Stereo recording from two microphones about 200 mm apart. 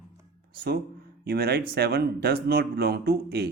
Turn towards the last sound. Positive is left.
turn(degrees=-50)  # may be behind; listen again after turning